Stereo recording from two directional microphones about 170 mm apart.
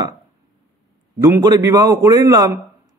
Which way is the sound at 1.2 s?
20° right (ahead or behind).